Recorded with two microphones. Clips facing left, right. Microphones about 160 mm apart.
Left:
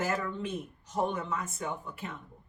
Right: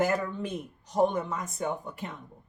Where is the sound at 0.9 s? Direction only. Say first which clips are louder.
Right 5 dB; 35° right (ahead or behind).